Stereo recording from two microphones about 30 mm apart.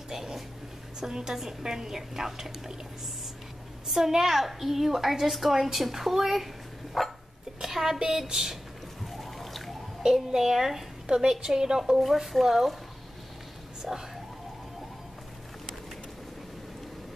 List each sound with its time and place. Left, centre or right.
0.1 s a sound: centre
1.1 s a woman's voice: centre
3.9 s a woman's voice: centre
7.6 s a woman's voice: centre
9.0 s a sound: centre
10.0 s a woman's voice: centre
12.0 s speech: centre
13.8 s a woman's voice: centre